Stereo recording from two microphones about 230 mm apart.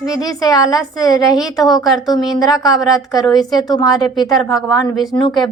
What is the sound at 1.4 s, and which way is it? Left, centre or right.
Speech, centre.